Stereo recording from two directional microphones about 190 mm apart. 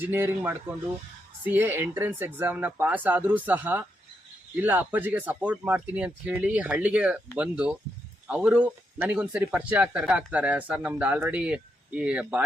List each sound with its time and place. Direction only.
0.0 s speech: 10° right (ahead or behind)